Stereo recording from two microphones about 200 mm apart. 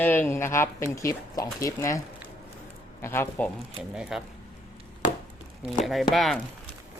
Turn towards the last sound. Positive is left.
turn(degrees=0)  # may be behind; listen again after turning